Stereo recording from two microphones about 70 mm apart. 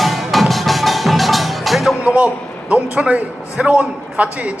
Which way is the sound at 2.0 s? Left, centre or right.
Centre.